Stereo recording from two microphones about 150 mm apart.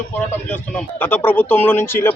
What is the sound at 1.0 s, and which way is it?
A man's voice, 15° left (ahead or behind).